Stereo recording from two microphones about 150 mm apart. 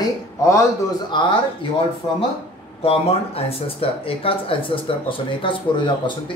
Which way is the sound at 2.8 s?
40° left (ahead or behind).